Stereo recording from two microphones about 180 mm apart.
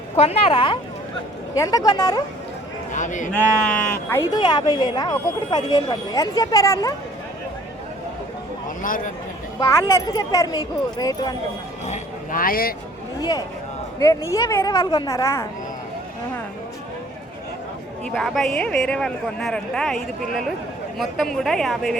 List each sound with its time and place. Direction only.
0.2 s speech: 30° left (ahead or behind)
1.5 s speech: 20° left (ahead or behind)
2.9 s a man's voice: 45° left (ahead or behind)
3.3 s a woman's voice: 10° left (ahead or behind)
4.4 s speech: 25° left (ahead or behind)
8.8 s a man's voice: 50° left (ahead or behind)
9.6 s speech: 15° left (ahead or behind)
11.9 s speech: 50° left (ahead or behind)
14.0 s a woman's voice: 20° left (ahead or behind)
18.1 s speech: centre (ahead or behind)